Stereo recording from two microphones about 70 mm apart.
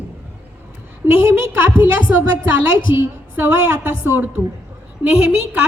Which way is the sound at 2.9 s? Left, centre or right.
Right.